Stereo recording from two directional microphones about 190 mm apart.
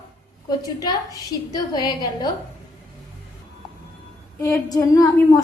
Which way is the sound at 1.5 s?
20° left (ahead or behind).